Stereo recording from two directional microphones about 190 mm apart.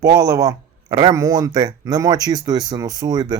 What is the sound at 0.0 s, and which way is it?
Speech, 20° right (ahead or behind).